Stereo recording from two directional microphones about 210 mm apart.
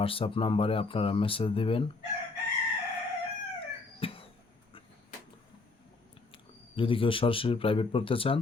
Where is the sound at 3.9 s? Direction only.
25° left (ahead or behind).